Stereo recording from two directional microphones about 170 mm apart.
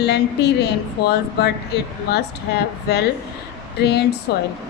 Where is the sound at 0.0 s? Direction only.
75° left (ahead or behind).